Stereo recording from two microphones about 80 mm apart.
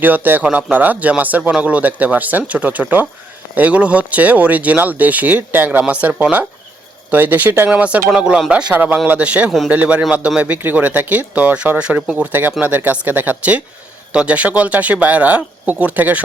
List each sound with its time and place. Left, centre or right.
0.0 s speech: right